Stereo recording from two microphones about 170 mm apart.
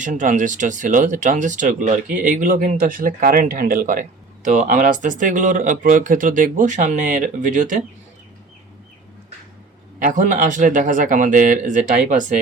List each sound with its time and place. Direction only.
0.0 s speech: 45° right (ahead or behind)
10.0 s speech: 50° right (ahead or behind)